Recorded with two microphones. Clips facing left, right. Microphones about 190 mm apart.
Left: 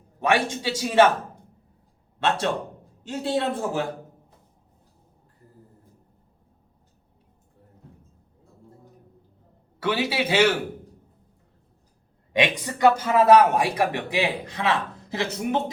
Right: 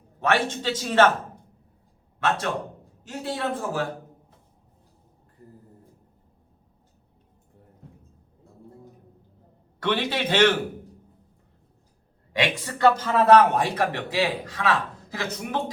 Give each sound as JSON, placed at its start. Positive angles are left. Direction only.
{"t": 0.2, "sound": "a man's voice", "side_deg": 15}
{"t": 2.1, "sound": "a man's voice", "side_deg": 25}
{"t": 9.8, "sound": "a man's voice", "side_deg": 5}
{"t": 12.3, "sound": "a man's voice", "side_deg": 15}